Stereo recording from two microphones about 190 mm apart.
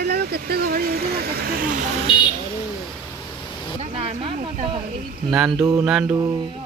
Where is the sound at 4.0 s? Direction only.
30° right (ahead or behind).